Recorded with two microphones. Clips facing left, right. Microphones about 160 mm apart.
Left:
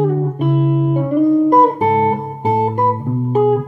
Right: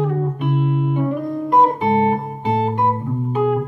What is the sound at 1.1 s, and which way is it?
Music, centre (ahead or behind).